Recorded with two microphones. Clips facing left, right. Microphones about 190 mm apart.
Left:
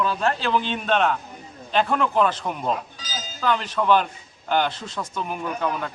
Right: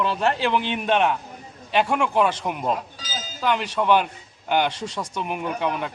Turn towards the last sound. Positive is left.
turn(degrees=-20)  # may be behind; listen again after turning